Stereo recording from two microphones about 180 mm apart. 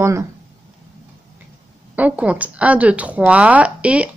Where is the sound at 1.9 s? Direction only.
10° right (ahead or behind).